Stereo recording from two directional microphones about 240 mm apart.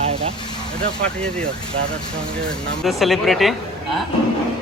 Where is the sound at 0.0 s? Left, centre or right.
Right.